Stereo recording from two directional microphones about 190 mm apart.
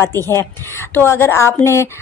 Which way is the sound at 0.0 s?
10° left (ahead or behind).